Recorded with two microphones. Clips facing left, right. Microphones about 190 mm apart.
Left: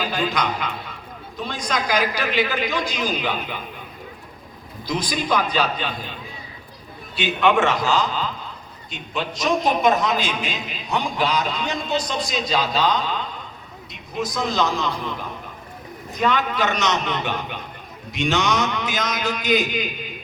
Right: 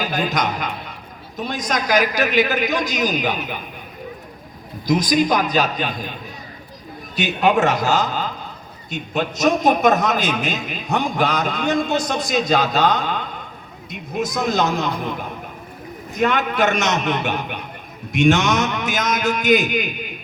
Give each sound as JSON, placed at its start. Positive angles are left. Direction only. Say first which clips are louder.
{"t": 0.0, "sound": "a man's voice", "louder": "right 2 dB", "side_deg": -45}
{"t": 4.9, "sound": "a man's voice", "louder": "right 6 dB", "side_deg": -45}
{"t": 7.2, "sound": "a man's voice", "louder": "right 2 dB", "side_deg": -40}